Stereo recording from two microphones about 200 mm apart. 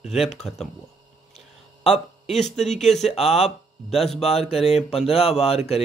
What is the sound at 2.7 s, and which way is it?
Speech, centre (ahead or behind).